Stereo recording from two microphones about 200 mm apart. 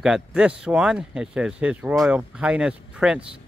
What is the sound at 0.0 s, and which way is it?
Speech, 5° right (ahead or behind).